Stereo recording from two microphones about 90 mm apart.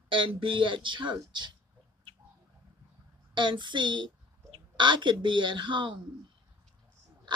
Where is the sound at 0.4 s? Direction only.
70° right (ahead or behind).